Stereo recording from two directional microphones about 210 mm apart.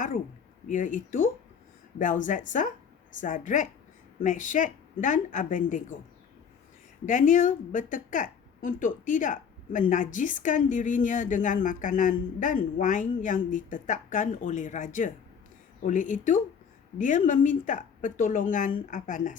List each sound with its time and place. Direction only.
0.7 s a woman's voice: 40° left (ahead or behind)
7.0 s a woman's voice: 40° left (ahead or behind)